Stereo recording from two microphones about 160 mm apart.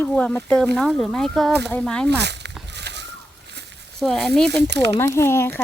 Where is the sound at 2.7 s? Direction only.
90° right.